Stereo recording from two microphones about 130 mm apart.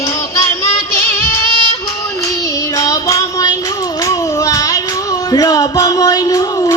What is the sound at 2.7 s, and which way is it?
Child singing, 25° left (ahead or behind).